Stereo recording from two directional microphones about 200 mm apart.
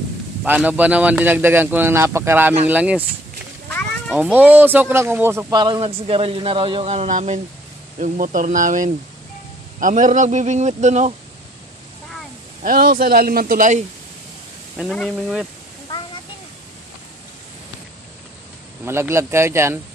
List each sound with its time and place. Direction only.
0.4 s a man's voice: 5° right (ahead or behind)
4.1 s a man's voice: 5° right (ahead or behind); by 11.1 s 35° right (ahead or behind)
12.6 s speech: 45° right (ahead or behind)
14.8 s speech: centre (ahead or behind)
18.9 s a man's voice: 15° right (ahead or behind)